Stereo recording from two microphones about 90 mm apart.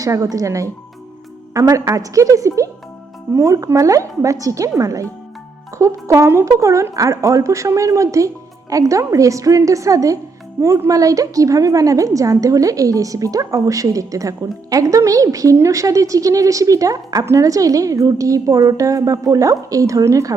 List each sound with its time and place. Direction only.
0.0 s a woman's voice: 40° right (ahead or behind)